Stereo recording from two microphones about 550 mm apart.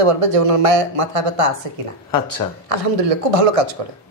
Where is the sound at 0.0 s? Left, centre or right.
Right.